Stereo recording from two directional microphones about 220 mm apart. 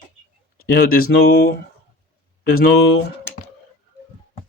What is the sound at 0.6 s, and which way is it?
Speech, 45° left (ahead or behind).